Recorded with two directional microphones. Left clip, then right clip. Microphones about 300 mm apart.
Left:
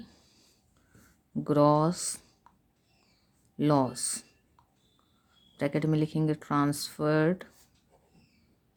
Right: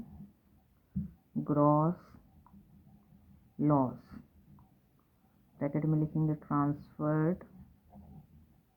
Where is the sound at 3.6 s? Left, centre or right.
Left.